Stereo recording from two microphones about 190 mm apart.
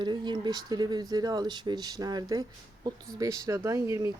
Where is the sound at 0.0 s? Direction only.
25° right (ahead or behind).